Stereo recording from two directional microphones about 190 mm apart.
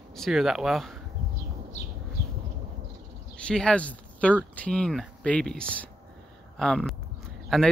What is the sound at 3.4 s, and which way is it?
Speech, 5° left (ahead or behind).